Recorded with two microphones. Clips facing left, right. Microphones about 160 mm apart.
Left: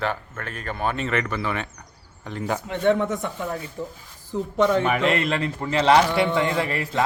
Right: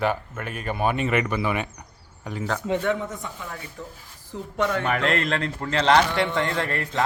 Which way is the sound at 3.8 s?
15° left (ahead or behind).